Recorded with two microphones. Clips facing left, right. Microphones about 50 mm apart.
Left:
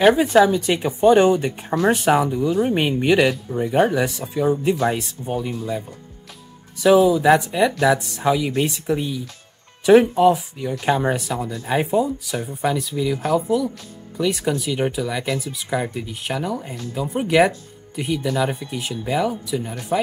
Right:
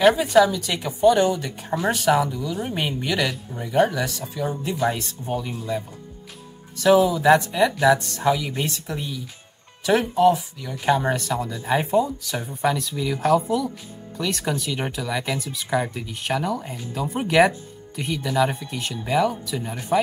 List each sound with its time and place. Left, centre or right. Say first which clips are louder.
0.1 s speech: left 3 dB; left
3.3 s speech: left 8 dB; centre
3.5 s speech: left 1 dB; left; by 5.9 s centre
7.0 s speech: left 2 dB; centre